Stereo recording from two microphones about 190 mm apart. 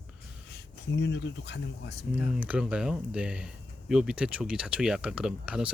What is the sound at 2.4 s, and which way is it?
Speech, 5° right (ahead or behind).